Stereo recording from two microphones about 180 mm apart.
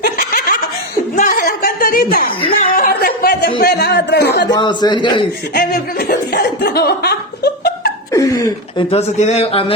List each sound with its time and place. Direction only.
0.0 s laughter: 55° left (ahead or behind)
1.1 s a sound: 50° left (ahead or behind)
3.6 s speech: 60° left (ahead or behind)
4.5 s speech: 25° left (ahead or behind)
5.5 s speech: 55° left (ahead or behind)
8.1 s speech: 20° left (ahead or behind)
8.9 s speech: 35° left (ahead or behind)